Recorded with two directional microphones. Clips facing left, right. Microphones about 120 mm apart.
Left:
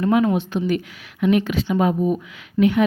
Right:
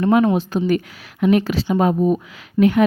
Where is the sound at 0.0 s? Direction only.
50° right (ahead or behind).